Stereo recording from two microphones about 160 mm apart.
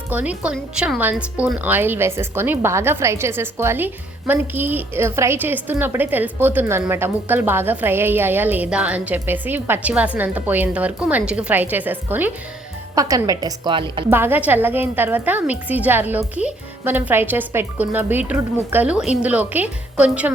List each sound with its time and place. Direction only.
0.1 s a woman's voice: 10° right (ahead or behind); by 14.0 s 30° right (ahead or behind)
14.1 s speech: 15° right (ahead or behind)